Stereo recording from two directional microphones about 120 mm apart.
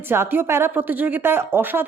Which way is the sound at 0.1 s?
20° right (ahead or behind).